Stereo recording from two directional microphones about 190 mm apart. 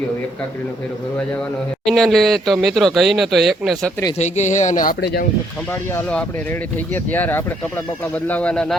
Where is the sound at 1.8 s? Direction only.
Centre (ahead or behind).